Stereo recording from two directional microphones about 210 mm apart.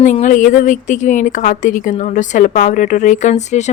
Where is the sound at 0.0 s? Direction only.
35° left (ahead or behind).